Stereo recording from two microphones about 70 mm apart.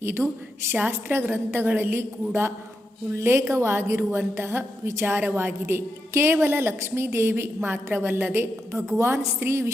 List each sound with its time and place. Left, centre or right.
0.0 s a woman's voice: right
0.7 s a woman's voice: right